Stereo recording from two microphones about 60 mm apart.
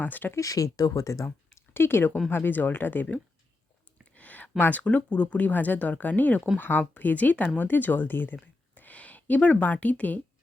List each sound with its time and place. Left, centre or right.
0.0 s speech: left
0.3 s speech: left
1.7 s speech: left
4.2 s a sound: left
4.5 s speech: left